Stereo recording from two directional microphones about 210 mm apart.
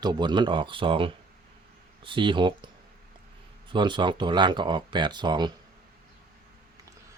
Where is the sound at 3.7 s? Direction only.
20° right (ahead or behind).